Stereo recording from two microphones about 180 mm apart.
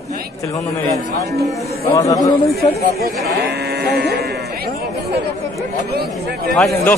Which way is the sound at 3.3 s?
65° right (ahead or behind).